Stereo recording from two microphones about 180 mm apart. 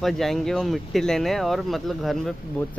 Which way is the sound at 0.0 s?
Centre (ahead or behind).